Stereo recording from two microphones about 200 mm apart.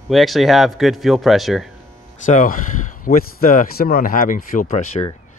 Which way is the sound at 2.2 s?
40° left (ahead or behind).